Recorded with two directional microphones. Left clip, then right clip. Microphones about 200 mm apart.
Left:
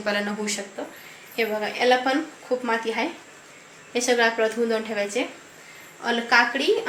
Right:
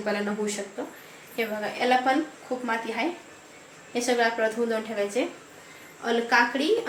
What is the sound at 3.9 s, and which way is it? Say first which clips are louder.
A woman's voice: left 3 dB; 15° left (ahead or behind).